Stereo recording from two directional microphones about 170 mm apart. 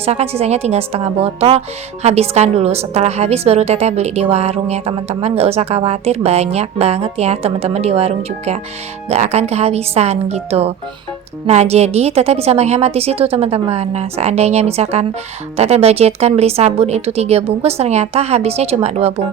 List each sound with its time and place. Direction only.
0.0 s a woman's voice: 40° right (ahead or behind)